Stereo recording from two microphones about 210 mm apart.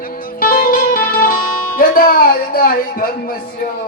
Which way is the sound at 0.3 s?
40° left (ahead or behind).